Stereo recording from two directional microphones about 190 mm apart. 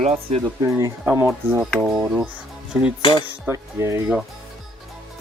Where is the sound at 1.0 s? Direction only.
5° right (ahead or behind).